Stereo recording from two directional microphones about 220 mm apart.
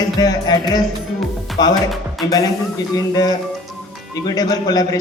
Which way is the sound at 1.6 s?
20° left (ahead or behind).